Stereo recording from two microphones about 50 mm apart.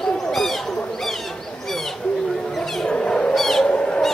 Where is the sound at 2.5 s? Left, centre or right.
Centre.